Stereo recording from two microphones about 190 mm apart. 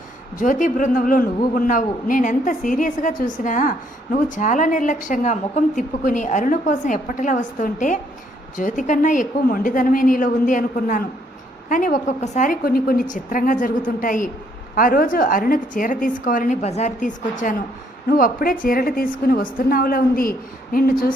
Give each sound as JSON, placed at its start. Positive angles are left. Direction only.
{"t": 0.3, "sound": "a woman's voice", "side_deg": 45}